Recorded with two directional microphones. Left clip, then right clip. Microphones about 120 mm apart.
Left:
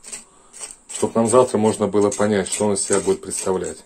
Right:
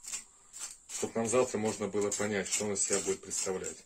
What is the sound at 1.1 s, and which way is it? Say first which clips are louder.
Speech: left 14 dB; 30° left (ahead or behind).